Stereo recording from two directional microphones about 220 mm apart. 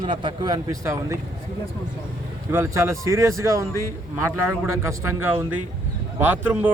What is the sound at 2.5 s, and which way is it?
Speech, 10° right (ahead or behind).